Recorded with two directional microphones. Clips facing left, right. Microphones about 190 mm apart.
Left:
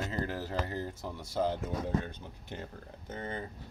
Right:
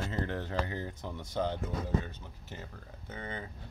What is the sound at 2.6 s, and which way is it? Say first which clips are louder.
Speech: left 3 dB; 50° left (ahead or behind).